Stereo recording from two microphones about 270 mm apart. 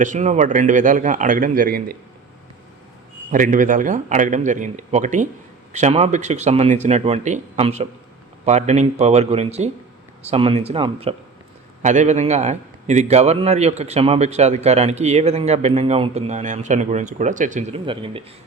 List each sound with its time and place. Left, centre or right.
0.0 s a man's voice: right
3.3 s a man's voice: right